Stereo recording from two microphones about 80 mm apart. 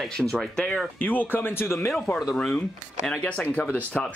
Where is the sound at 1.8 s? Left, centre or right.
Centre.